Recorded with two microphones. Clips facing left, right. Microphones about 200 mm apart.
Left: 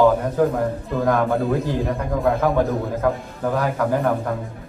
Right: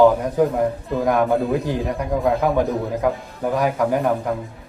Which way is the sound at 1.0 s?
15° right (ahead or behind).